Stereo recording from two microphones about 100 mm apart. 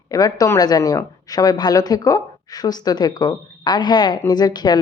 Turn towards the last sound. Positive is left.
turn(degrees=45)  # may be behind; listen again after turning